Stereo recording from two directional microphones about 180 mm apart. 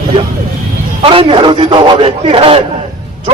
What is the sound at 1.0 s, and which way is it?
A man's voice, 30° right (ahead or behind).